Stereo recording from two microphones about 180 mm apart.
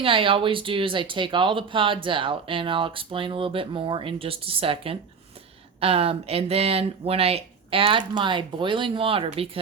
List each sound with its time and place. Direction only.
0.0 s speech: 30° right (ahead or behind)